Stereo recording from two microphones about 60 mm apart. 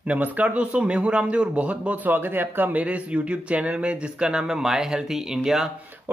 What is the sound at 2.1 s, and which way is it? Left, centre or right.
Speech, right.